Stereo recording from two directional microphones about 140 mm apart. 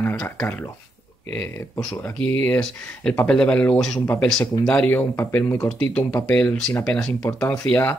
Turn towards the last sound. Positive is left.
turn(degrees=15)  # may be behind; listen again after turning